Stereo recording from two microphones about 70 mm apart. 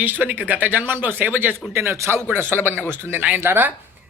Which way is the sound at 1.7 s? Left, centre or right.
Right.